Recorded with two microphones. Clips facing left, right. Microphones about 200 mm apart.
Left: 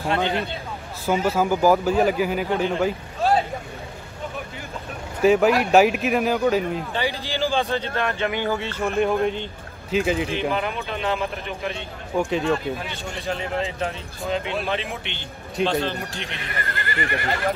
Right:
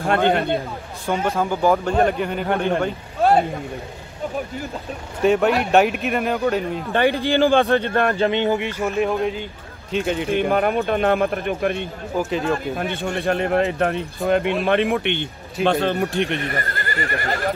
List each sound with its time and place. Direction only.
0.0 s speech: 55° right (ahead or behind)
1.0 s speech: 5° left (ahead or behind)
2.4 s speech: 60° right (ahead or behind)
5.2 s speech: centre (ahead or behind)
6.9 s speech: 55° right (ahead or behind)
8.2 s a sound: 25° right (ahead or behind)
8.8 s speech: centre (ahead or behind)
10.5 s speech: 50° right (ahead or behind)
12.2 s speech: centre (ahead or behind)
12.7 s speech: 55° right (ahead or behind)